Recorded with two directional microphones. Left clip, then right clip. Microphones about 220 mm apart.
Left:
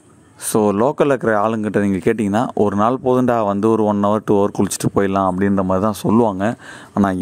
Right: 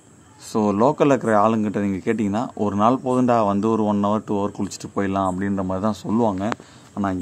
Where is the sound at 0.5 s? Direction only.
40° left (ahead or behind).